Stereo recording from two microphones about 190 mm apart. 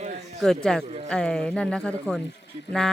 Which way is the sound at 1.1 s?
5° left (ahead or behind).